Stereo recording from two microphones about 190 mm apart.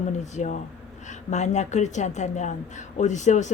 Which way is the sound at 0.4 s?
35° left (ahead or behind).